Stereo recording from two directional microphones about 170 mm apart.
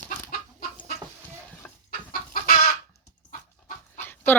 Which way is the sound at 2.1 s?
50° left (ahead or behind).